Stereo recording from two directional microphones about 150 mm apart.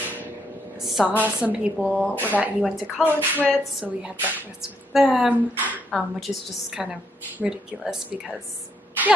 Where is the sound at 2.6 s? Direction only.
Centre (ahead or behind).